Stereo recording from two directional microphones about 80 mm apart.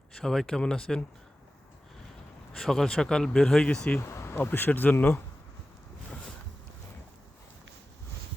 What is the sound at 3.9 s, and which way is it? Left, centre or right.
Speech, left.